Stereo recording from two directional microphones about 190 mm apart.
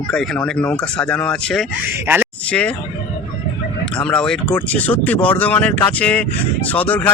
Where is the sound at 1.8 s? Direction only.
10° right (ahead or behind).